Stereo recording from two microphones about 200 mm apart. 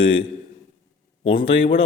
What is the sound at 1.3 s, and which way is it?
Speech, 30° left (ahead or behind).